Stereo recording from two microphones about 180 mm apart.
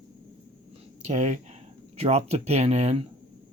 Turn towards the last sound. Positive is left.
turn(degrees=-35)  # may be behind; listen again after turning